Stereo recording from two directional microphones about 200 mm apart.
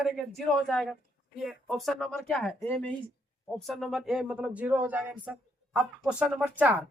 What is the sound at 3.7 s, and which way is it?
Speech, centre (ahead or behind).